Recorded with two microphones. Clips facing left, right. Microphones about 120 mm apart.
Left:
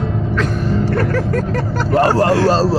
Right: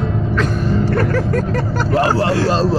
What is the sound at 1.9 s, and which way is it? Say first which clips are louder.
Speech: left 3 dB; 50° left (ahead or behind).